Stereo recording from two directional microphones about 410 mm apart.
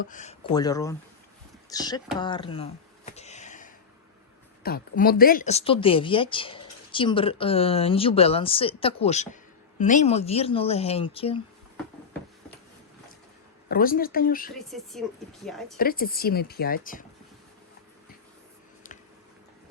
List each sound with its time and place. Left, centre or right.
0.0 s speech: centre
3.1 s a sound: centre
4.6 s speech: left
13.7 s speech: left
14.5 s speech: centre
15.8 s speech: left